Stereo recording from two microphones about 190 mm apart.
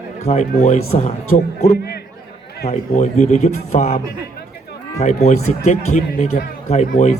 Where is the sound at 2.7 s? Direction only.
35° left (ahead or behind).